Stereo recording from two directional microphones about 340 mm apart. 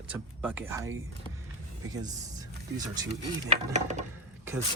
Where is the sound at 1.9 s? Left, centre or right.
Centre.